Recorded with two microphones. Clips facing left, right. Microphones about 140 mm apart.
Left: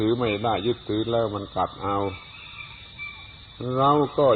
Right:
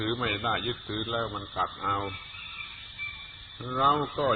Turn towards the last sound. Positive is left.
turn(degrees=30)  # may be behind; listen again after turning